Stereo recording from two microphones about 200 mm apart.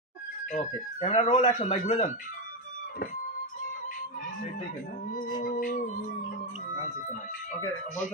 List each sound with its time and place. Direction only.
1.0 s a man's voice: 30° left (ahead or behind)
5.4 s a man's voice: 40° left (ahead or behind)